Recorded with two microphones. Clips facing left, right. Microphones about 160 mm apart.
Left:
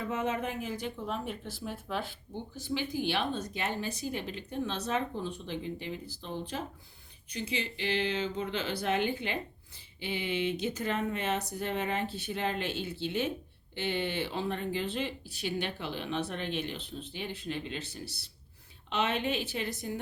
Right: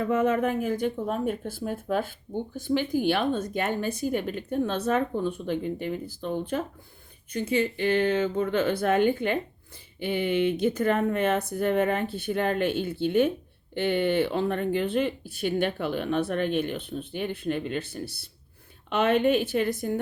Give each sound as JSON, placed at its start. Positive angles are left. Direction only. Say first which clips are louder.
{"t": 0.0, "sound": "speech", "louder": "right 9 dB", "side_deg": -55}